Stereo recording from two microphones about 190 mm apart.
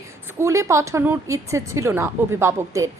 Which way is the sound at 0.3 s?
15° right (ahead or behind).